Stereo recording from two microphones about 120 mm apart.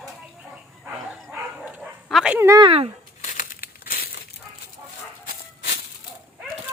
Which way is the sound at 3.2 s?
90° left.